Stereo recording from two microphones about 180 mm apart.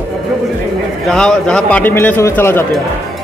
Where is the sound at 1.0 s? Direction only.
5° left (ahead or behind).